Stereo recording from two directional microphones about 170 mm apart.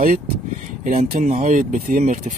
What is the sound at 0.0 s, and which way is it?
Speech, 50° right (ahead or behind).